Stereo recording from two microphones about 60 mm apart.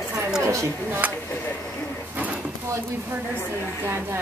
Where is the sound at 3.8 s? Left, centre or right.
Right.